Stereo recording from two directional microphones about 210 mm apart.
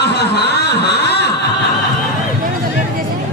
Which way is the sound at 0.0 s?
55° left (ahead or behind).